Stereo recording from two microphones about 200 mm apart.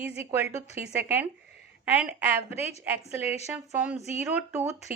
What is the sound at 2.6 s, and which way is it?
Speech, 35° left (ahead or behind).